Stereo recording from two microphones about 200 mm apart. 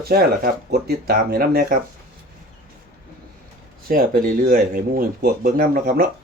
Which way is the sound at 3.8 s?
45° right (ahead or behind).